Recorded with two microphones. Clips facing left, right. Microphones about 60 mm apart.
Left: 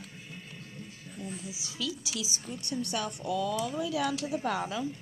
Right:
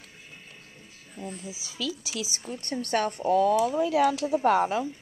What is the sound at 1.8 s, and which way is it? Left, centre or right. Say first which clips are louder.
Speech: right 3 dB; right.